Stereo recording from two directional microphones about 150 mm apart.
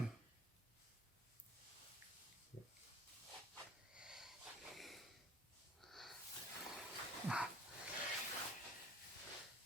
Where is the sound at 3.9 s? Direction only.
5° right (ahead or behind).